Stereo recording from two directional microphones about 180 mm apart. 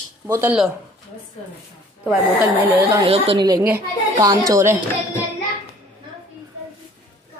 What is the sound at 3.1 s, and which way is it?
Speech, 30° right (ahead or behind).